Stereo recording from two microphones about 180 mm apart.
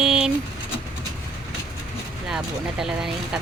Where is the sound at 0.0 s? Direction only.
Centre (ahead or behind).